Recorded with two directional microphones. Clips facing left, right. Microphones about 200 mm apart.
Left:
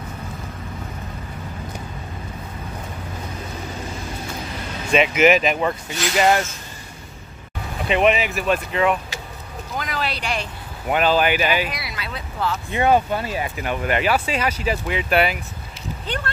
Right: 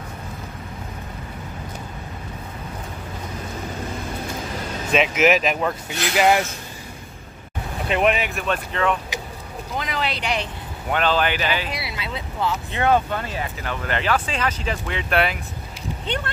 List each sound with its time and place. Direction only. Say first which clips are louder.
4.9 s speech: left 2 dB; centre (ahead or behind)
7.9 s speech: left 2 dB; centre (ahead or behind)
9.8 s a sound: even; 20° right (ahead or behind)
10.9 s speech: left 3 dB; 10° left (ahead or behind)
11.7 s speech: right 2 dB; 25° right (ahead or behind)
12.7 s speech: left 3 dB; 10° left (ahead or behind)
16.1 s speech: right 1 dB; 25° right (ahead or behind)